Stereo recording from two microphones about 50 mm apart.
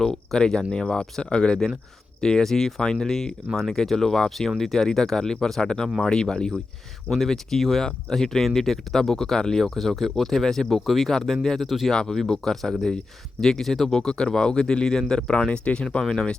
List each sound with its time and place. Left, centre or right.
0.0 s speech: centre
2.2 s speech: centre
11.9 s speech: centre